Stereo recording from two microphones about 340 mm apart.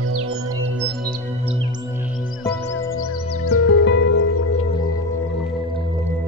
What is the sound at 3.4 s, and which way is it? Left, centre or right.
Music, left.